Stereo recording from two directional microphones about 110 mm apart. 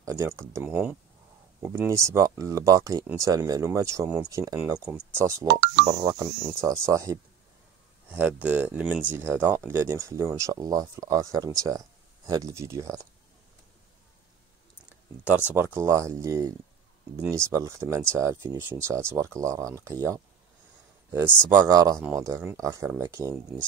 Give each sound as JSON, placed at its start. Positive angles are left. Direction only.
{"t": 0.0, "sound": "speech", "side_deg": -25}
{"t": 5.9, "sound": "speech", "side_deg": -40}
{"t": 6.1, "sound": "speech", "side_deg": -30}
{"t": 8.1, "sound": "speech", "side_deg": -15}
{"t": 15.2, "sound": "speech", "side_deg": -15}